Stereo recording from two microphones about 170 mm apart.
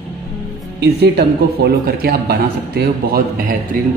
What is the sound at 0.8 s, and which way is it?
Speech, 70° right (ahead or behind).